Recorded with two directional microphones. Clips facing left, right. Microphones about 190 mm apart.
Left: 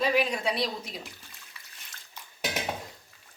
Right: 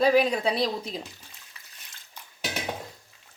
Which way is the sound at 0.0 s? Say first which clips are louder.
Right 5 dB; 35° right (ahead or behind).